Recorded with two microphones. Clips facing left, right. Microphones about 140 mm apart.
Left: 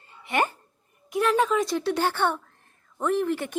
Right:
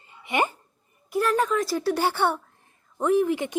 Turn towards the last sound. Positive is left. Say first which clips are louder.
# right 3 dB
turn(degrees=-15)  # may be behind; listen again after turning